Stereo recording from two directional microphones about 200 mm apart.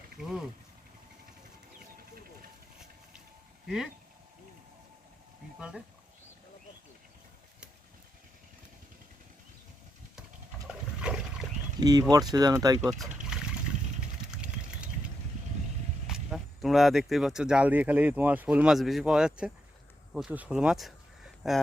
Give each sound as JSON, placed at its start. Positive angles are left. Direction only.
{"t": 0.2, "sound": "speech", "side_deg": -5}
{"t": 5.5, "sound": "speech", "side_deg": -5}
{"t": 10.7, "sound": "water", "side_deg": -5}
{"t": 11.8, "sound": "speech", "side_deg": -20}
{"t": 14.3, "sound": "a sound", "side_deg": -5}
{"t": 16.0, "sound": "speech", "side_deg": 0}